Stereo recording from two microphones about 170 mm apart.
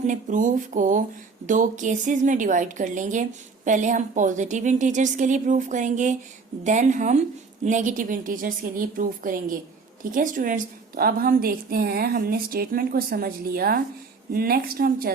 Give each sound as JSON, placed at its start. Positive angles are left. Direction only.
{"t": 0.0, "sound": "a woman's voice", "side_deg": -50}